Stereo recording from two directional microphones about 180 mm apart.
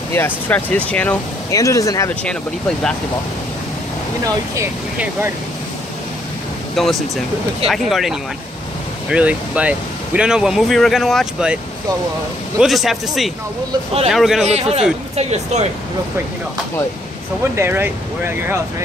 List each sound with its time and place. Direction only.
0.1 s speech: 10° left (ahead or behind)
4.6 s speech: 10° right (ahead or behind)
6.8 s speech: centre (ahead or behind)
12.5 s speech: centre (ahead or behind)
14.4 s a man's voice: 35° right (ahead or behind)
17.6 s speech: 10° right (ahead or behind)